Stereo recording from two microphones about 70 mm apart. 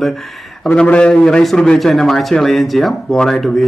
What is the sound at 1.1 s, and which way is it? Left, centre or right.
A man's voice, centre.